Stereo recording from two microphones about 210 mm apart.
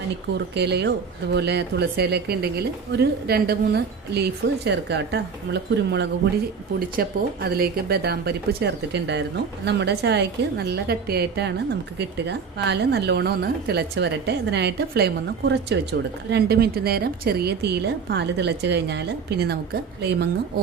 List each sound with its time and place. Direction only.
0.3 s a woman's voice: 55° right (ahead or behind)